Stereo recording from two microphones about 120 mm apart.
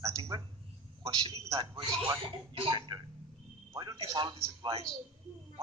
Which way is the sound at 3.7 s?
35° right (ahead or behind).